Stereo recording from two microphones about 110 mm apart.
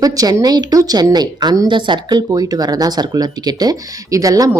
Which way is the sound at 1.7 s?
45° right (ahead or behind).